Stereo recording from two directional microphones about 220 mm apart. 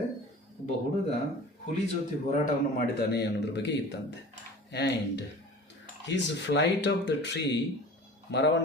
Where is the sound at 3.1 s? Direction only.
50° left (ahead or behind).